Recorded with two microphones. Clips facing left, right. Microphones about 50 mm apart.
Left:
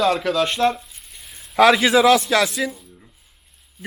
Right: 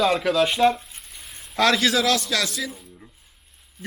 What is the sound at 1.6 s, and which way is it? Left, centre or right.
A man's voice, centre.